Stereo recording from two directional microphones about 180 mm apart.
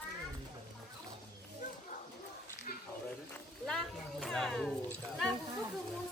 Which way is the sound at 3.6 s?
5° left (ahead or behind).